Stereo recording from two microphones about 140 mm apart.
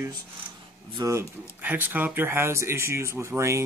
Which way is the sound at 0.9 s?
25° right (ahead or behind).